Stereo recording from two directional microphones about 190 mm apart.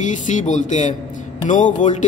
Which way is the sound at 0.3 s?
40° left (ahead or behind).